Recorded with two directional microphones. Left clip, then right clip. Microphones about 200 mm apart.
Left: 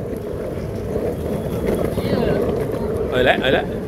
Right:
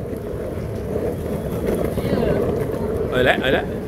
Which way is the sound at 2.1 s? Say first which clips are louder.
Even; 25° left (ahead or behind).